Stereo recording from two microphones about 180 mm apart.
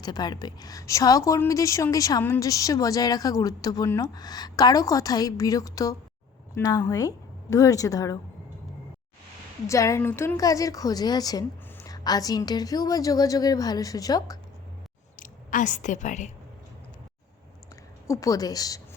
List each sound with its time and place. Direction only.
0.0 s a woman's voice: 25° left (ahead or behind)
9.6 s a woman's voice: 15° left (ahead or behind)
15.1 s speech: 45° left (ahead or behind)
18.1 s a woman's voice: 20° left (ahead or behind)